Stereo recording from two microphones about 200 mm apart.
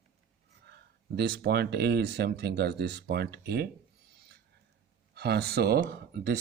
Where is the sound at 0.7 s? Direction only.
55° right (ahead or behind).